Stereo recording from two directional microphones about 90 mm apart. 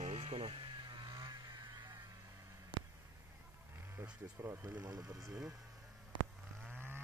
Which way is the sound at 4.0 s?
25° right (ahead or behind).